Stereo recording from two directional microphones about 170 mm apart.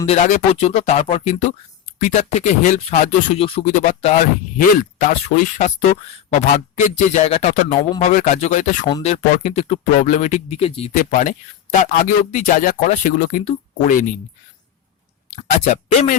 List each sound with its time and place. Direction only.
0.0 s speech: 40° left (ahead or behind)
7.1 s speech: 40° left (ahead or behind)
10.9 s speech: 50° left (ahead or behind)
15.4 s speech: 40° left (ahead or behind)